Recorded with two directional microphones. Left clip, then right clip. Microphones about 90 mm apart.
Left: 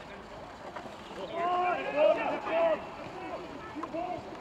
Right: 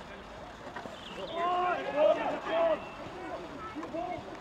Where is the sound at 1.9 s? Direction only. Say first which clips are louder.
Left 1 dB; 10° right (ahead or behind).